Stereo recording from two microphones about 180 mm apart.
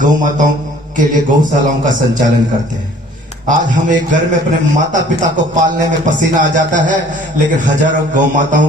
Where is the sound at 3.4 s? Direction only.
45° right (ahead or behind).